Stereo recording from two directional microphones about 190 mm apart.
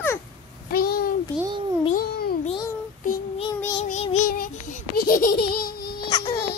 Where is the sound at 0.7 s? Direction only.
50° left (ahead or behind).